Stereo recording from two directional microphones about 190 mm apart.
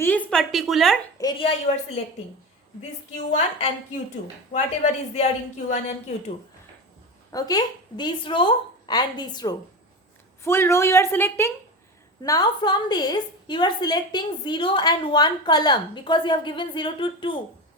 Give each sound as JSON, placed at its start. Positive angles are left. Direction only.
{"t": 0.0, "sound": "speech", "side_deg": 10}
{"t": 1.2, "sound": "a woman's voice", "side_deg": 30}
{"t": 3.1, "sound": "speech", "side_deg": 35}
{"t": 7.3, "sound": "a woman's voice", "side_deg": 20}